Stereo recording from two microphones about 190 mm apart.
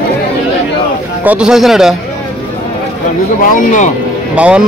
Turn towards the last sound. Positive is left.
turn(degrees=-5)  # may be behind; listen again after turning